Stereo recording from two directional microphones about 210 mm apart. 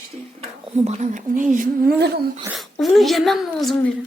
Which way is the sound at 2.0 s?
50° right (ahead or behind).